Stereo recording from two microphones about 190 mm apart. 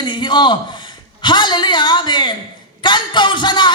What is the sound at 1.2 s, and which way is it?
Speech, 25° left (ahead or behind).